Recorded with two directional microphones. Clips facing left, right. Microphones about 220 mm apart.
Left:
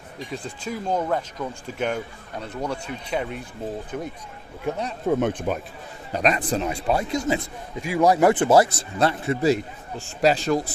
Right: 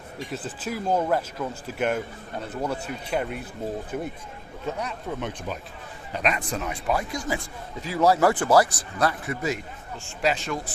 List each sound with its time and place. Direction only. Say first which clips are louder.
0.3 s speech: left 1 dB; 5° right (ahead or behind)
4.7 s a man's voice: left 3 dB; 15° left (ahead or behind)
5.0 s speech: left 14 dB; 50° left (ahead or behind)
6.1 s a man's voice: left 5 dB; 35° left (ahead or behind)